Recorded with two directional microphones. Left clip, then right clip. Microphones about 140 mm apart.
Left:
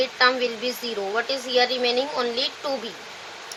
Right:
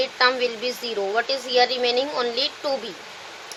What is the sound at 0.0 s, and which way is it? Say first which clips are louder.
A child's voice: even; 45° right (ahead or behind).